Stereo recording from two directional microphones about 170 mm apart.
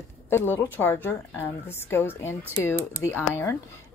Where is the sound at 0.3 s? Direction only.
15° left (ahead or behind).